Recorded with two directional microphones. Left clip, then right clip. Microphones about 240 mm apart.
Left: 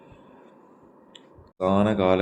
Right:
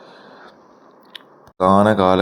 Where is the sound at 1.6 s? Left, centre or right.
Centre.